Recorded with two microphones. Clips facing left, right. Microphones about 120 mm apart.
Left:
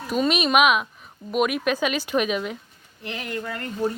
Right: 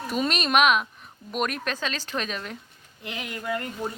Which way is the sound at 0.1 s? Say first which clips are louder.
Left 4 dB; centre (ahead or behind).